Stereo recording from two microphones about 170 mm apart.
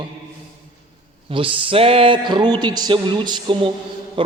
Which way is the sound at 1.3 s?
30° right (ahead or behind).